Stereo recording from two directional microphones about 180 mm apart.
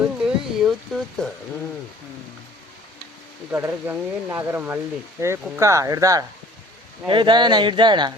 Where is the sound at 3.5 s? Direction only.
10° right (ahead or behind).